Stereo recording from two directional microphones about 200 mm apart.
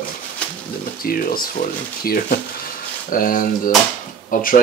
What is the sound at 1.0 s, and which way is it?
Speech, 45° left (ahead or behind).